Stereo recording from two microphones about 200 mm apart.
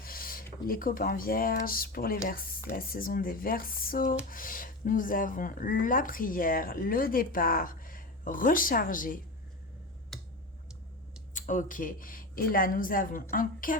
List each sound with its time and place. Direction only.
0.0 s speech: 45° left (ahead or behind)
11.3 s speech: 40° left (ahead or behind)